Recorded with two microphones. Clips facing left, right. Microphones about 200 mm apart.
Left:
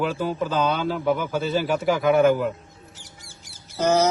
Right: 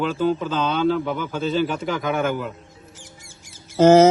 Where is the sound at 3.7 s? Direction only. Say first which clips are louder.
Right 8 dB; 90° right.